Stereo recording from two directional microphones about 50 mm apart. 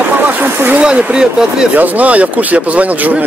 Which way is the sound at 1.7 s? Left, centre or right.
Right.